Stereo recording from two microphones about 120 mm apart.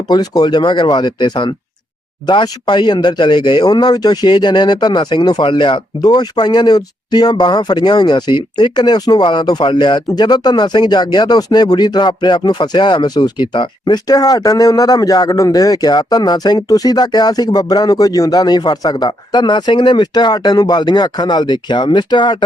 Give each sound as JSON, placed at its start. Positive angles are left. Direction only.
{"t": 0.1, "sound": "speech", "side_deg": 35}